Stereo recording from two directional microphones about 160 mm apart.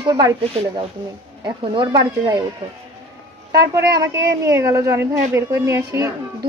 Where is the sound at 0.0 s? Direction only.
25° right (ahead or behind).